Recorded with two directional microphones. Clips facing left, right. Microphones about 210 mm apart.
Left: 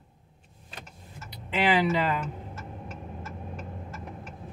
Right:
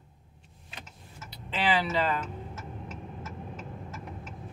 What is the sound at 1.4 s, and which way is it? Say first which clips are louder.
Speech: left 4 dB; 15° left (ahead or behind).